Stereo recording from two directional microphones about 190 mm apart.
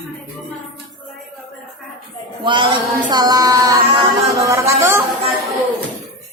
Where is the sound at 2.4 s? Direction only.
25° right (ahead or behind).